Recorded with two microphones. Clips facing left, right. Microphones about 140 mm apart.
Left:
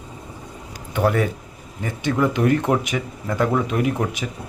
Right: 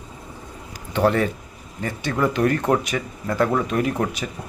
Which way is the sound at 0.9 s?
10° left (ahead or behind).